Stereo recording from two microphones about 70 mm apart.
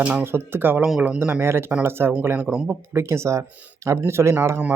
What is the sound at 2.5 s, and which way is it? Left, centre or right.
Speech, centre.